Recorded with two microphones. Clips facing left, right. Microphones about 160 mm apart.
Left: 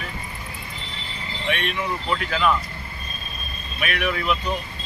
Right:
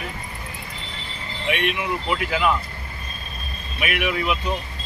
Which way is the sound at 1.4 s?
15° right (ahead or behind).